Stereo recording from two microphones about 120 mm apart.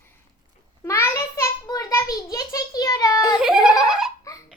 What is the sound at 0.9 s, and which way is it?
A child's voice, 20° left (ahead or behind).